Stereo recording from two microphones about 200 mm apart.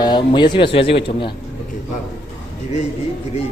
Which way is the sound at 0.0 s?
20° left (ahead or behind).